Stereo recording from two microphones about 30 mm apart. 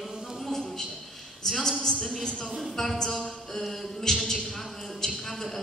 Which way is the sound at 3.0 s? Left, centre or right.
Centre.